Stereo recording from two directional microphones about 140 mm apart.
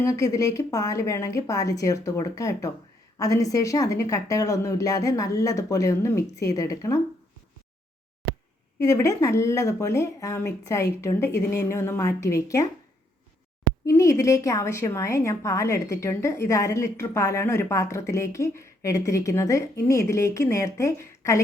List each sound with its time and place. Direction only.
0.0 s a woman's voice: 25° left (ahead or behind)
8.8 s a woman's voice: 25° left (ahead or behind)
13.8 s a woman's voice: 20° left (ahead or behind)